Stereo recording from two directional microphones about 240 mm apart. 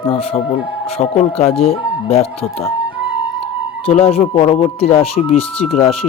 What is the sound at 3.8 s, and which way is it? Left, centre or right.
Speech, left.